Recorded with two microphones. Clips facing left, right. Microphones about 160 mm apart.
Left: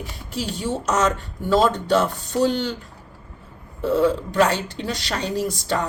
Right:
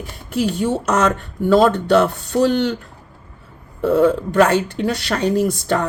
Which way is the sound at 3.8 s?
55° right (ahead or behind).